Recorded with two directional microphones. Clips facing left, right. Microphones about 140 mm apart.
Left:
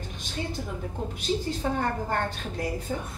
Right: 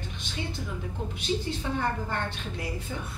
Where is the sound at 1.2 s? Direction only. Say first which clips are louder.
Left 3 dB; 40° left (ahead or behind).